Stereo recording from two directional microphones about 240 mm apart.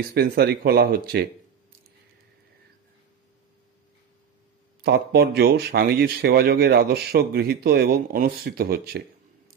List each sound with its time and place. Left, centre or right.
0.1 s speech: right
4.8 s speech: right